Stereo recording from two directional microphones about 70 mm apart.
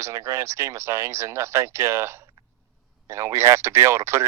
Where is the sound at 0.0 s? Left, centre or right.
Right.